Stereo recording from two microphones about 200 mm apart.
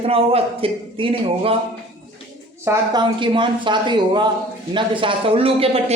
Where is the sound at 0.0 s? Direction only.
30° right (ahead or behind).